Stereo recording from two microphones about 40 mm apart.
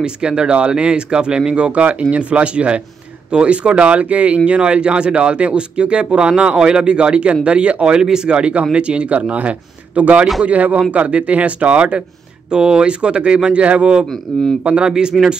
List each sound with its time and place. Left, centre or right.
0.0 s speech: right
12.4 s speech: right
14.0 s speech: centre
14.6 s speech: right
14.9 s speech: centre